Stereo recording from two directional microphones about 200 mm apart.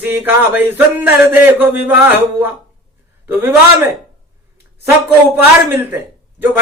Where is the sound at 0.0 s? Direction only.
10° right (ahead or behind).